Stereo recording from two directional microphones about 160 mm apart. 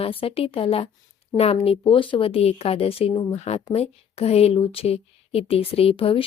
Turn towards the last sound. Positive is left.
turn(degrees=35)  # may be behind; listen again after turning